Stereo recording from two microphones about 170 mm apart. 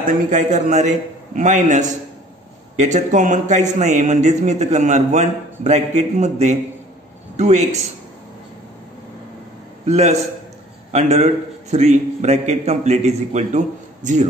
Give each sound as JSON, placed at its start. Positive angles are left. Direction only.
{"t": 0.0, "sound": "a man's voice", "side_deg": -45}
{"t": 9.8, "sound": "a man's voice", "side_deg": -40}